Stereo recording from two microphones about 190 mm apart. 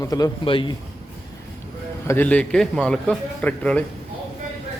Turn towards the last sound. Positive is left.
turn(degrees=5)  # may be behind; listen again after turning